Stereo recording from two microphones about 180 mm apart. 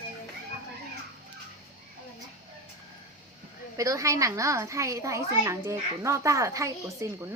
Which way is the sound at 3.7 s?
15° right (ahead or behind).